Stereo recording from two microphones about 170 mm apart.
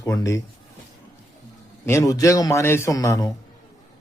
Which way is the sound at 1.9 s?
20° left (ahead or behind).